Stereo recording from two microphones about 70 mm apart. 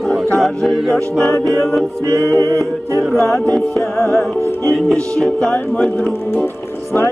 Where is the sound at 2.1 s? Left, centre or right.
Right.